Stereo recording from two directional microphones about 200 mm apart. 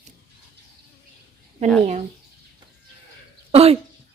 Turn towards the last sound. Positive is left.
turn(degrees=-30)  # may be behind; listen again after turning